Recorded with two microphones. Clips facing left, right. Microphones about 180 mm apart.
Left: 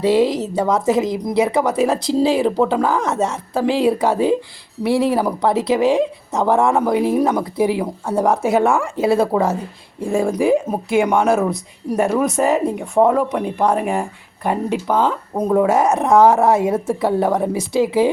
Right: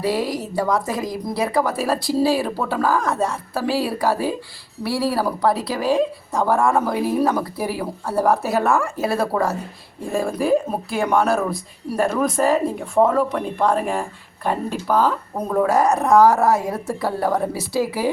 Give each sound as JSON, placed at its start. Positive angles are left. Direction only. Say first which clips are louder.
{"t": 0.0, "sound": "speech", "louder": "left 7 dB", "side_deg": 25}